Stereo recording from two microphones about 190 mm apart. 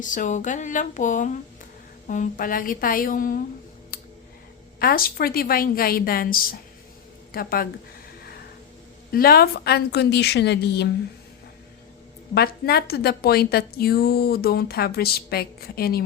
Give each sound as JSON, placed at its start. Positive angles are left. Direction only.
{"t": 0.0, "sound": "a woman's voice", "side_deg": 40}
{"t": 3.9, "sound": "a sound", "side_deg": 50}
{"t": 4.8, "sound": "a woman's voice", "side_deg": 50}
{"t": 9.1, "sound": "a woman's voice", "side_deg": 55}
{"t": 12.3, "sound": "a woman's voice", "side_deg": 55}